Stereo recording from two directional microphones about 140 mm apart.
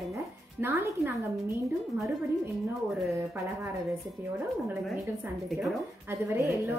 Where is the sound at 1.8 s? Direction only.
Centre (ahead or behind).